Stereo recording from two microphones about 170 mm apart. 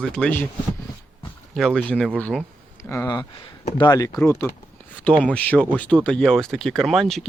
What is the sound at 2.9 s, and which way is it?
Speech, 20° left (ahead or behind).